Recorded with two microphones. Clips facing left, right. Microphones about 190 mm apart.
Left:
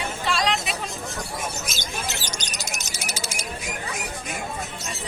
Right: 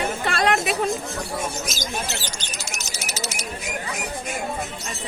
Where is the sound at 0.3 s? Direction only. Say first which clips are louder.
Right 3 dB; 55° right (ahead or behind).